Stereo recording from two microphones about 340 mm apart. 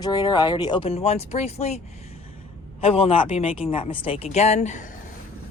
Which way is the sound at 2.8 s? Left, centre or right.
Centre.